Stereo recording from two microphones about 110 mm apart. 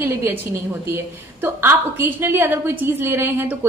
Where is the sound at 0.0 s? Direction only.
20° right (ahead or behind).